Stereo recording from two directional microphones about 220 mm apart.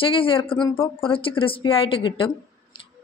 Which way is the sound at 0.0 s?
25° left (ahead or behind).